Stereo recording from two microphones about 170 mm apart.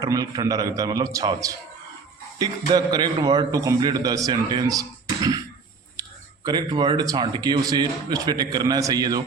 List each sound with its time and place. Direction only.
0.0 s a man's voice: 20° right (ahead or behind)
6.4 s a man's voice: 25° right (ahead or behind)